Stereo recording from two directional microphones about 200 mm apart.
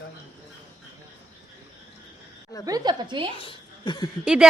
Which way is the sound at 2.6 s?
20° right (ahead or behind).